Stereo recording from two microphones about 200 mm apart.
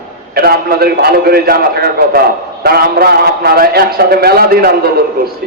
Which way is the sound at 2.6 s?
50° right (ahead or behind).